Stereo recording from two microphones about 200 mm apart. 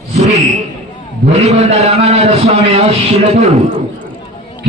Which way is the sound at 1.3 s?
30° right (ahead or behind).